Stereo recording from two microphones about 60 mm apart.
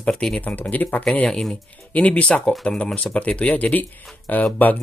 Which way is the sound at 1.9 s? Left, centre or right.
Left.